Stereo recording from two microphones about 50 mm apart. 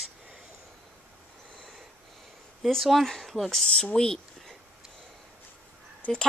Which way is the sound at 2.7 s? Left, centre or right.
Centre.